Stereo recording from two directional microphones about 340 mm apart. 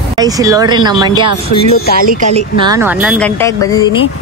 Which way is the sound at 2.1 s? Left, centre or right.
Centre.